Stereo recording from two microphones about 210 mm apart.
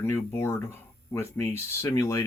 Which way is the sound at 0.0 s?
10° left (ahead or behind).